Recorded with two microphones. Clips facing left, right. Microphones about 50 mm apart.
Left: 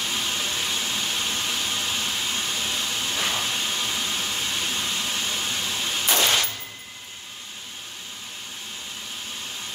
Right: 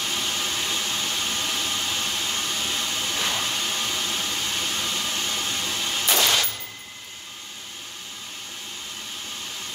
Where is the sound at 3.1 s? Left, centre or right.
Centre.